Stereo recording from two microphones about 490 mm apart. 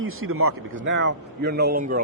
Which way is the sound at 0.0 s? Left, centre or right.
Right.